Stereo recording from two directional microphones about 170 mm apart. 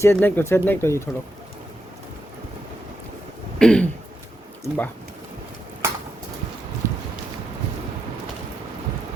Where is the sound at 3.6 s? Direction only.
5° left (ahead or behind).